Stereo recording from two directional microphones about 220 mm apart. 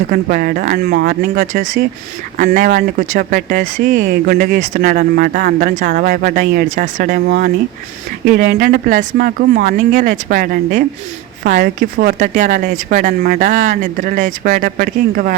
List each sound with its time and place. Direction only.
0.1 s speech: 40° right (ahead or behind)